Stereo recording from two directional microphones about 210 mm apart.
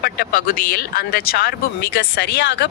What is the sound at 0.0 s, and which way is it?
Speech, 45° left (ahead or behind).